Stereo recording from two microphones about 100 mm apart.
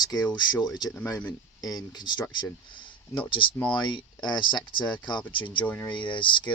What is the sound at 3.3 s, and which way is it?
Speech, 60° left (ahead or behind).